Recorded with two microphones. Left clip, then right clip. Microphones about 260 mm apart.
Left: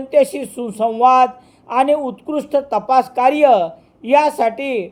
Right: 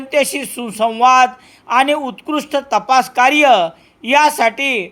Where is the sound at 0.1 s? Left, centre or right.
Right.